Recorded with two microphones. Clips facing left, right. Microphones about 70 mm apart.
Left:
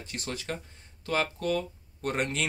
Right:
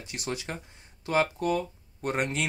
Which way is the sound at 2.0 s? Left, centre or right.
Centre.